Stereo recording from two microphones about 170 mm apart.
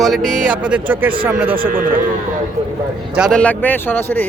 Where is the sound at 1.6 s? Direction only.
55° right (ahead or behind).